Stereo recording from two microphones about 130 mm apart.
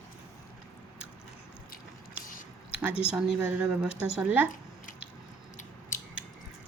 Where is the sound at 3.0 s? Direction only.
5° right (ahead or behind).